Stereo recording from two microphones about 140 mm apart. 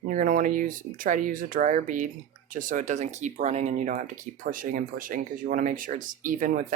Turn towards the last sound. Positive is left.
turn(degrees=-70)  # may be behind; listen again after turning